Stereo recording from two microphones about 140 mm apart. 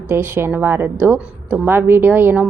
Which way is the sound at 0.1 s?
15° right (ahead or behind).